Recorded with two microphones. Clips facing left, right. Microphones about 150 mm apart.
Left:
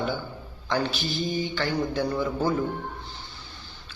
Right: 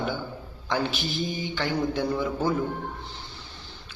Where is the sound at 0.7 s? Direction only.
20° right (ahead or behind).